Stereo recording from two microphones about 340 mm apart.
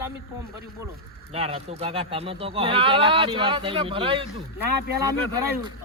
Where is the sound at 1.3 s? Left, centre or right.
Centre.